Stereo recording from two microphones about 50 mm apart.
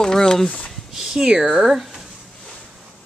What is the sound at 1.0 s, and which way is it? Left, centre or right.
Speech, centre.